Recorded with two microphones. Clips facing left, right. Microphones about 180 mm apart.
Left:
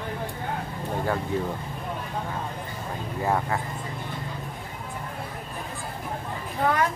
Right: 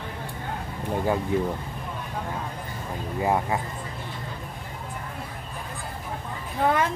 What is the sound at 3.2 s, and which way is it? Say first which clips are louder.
Speech: right 1 dB; 15° right (ahead or behind).